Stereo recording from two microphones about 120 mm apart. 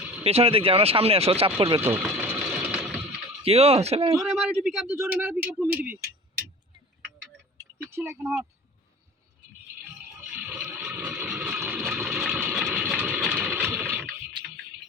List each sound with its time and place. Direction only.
0.0 s a sound: 10° right (ahead or behind)
0.3 s speech: 55° right (ahead or behind)
2.0 s sewing machine: 10° right (ahead or behind)
3.4 s speech: 55° right (ahead or behind)
4.3 s speech: 5° right (ahead or behind)
7.8 s speech: 20° right (ahead or behind)
10.2 s a sound: 10° right (ahead or behind)
13.1 s engine: 5° right (ahead or behind)
13.5 s a sound: 15° right (ahead or behind)